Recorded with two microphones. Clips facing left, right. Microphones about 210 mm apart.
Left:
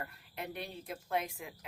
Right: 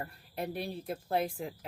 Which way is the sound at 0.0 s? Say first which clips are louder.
Right 5 dB; 35° right (ahead or behind).